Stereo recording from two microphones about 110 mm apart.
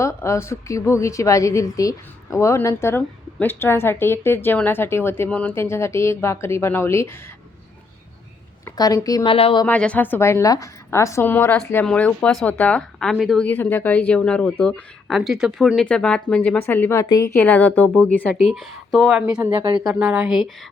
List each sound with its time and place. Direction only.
0.0 s a woman's voice: 25° left (ahead or behind)
5.3 s speech: 10° left (ahead or behind)
5.5 s a woman's voice: 25° left (ahead or behind)
8.6 s a woman's voice: 30° left (ahead or behind)
9.2 s speech: 55° left (ahead or behind)
9.6 s a woman's voice: 10° left (ahead or behind)
13.4 s speech: 15° left (ahead or behind)
17.0 s speech: 30° left (ahead or behind); by 18.0 s 10° left (ahead or behind)
18.5 s speech: centre (ahead or behind)
19.4 s speech: 20° right (ahead or behind)
19.6 s speech: 50° right (ahead or behind)
19.9 s a woman's voice: 10° right (ahead or behind)